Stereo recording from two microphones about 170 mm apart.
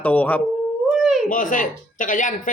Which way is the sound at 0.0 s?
10° left (ahead or behind).